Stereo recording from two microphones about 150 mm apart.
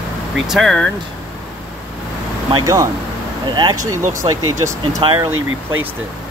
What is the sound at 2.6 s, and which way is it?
Speech, 20° right (ahead or behind).